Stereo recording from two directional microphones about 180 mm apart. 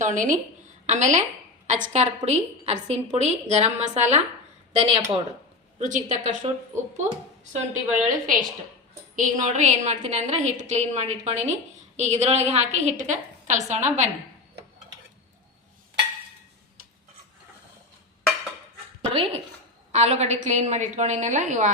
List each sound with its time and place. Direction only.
0.0 s a woman's voice: 45° right (ahead or behind)
7.5 s a woman's voice: 40° right (ahead or behind)
19.9 s a woman's voice: 35° right (ahead or behind)